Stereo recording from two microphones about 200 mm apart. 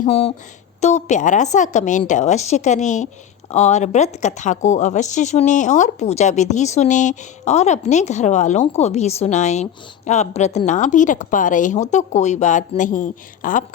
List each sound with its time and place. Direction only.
0.0 s a woman's voice: 30° left (ahead or behind)